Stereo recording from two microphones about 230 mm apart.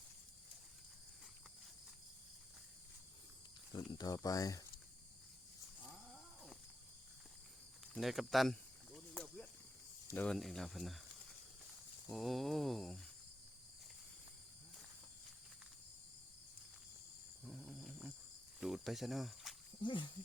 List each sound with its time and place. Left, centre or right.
3.9 s speech: centre
5.9 s a sound: centre
7.9 s cricket: centre
10.2 s speech: centre
12.1 s speech: centre
17.4 s snoring: centre
18.6 s speech: centre
19.8 s speech: left